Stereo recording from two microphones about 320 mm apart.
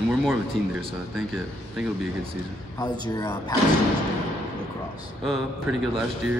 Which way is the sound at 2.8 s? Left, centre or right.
Centre.